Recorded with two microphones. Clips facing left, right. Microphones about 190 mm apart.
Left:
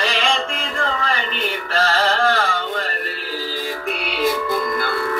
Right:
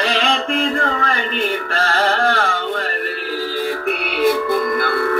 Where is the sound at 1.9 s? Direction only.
55° right (ahead or behind).